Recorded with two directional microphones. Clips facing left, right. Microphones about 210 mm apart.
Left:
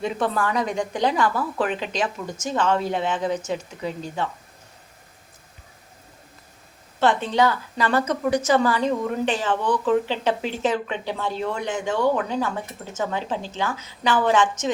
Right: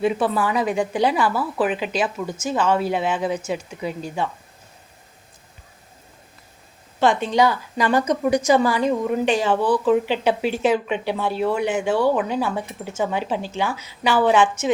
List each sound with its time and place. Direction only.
0.0 s a woman's voice: 5° right (ahead or behind)
7.0 s a woman's voice: 15° right (ahead or behind)